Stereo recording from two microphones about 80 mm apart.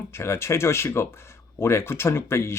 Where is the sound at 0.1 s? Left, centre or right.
Left.